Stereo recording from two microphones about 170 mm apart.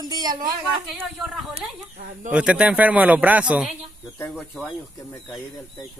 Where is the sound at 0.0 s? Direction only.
25° right (ahead or behind).